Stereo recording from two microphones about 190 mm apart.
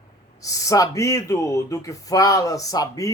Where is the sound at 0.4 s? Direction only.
15° left (ahead or behind).